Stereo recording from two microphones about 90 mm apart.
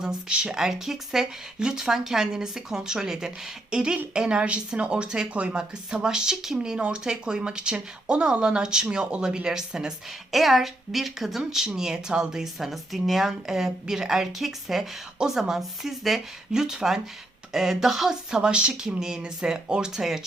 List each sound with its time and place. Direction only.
0.0 s speech: 10° right (ahead or behind)